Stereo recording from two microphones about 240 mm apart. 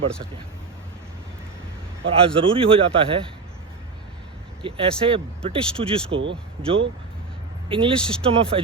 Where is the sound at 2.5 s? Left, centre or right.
Right.